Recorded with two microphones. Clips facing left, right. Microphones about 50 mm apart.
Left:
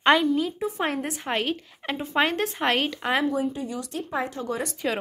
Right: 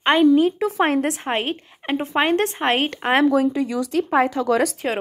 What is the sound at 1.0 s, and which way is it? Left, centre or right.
Speech, right.